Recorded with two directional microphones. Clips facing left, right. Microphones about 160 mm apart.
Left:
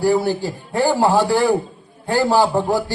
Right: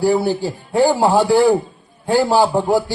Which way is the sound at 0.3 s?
15° right (ahead or behind).